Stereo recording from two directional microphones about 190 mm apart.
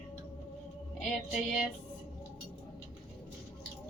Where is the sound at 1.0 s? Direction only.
Centre (ahead or behind).